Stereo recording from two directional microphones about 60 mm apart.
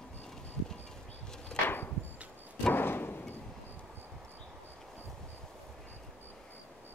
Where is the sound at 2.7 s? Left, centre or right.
Left.